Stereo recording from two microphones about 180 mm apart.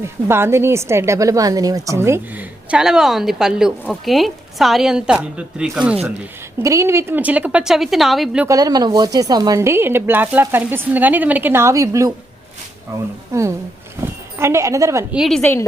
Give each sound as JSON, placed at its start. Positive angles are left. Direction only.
{"t": 0.0, "sound": "a woman's voice", "side_deg": -15}
{"t": 6.6, "sound": "a woman's voice", "side_deg": -15}
{"t": 8.4, "sound": "a woman's voice", "side_deg": -20}
{"t": 15.1, "sound": "a woman's voice", "side_deg": 0}